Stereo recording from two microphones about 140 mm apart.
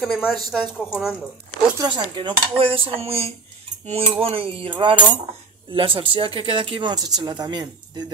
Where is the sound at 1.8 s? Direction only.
30° right (ahead or behind).